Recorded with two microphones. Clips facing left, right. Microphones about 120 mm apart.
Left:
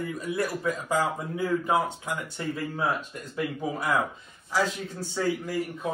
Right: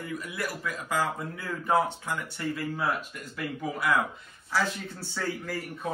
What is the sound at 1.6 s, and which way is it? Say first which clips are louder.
Speech: even; 20° left (ahead or behind).